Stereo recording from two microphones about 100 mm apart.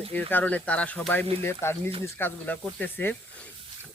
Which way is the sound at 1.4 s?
25° left (ahead or behind).